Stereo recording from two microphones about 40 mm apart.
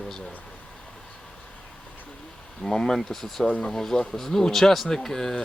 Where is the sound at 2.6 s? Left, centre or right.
Centre.